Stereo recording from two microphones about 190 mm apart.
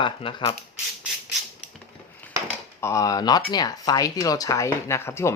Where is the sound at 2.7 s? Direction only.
15° left (ahead or behind).